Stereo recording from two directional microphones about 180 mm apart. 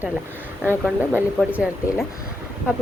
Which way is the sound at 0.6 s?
10° left (ahead or behind).